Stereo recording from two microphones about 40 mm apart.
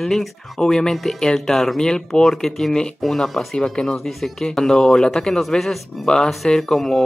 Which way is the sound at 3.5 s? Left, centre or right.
Centre.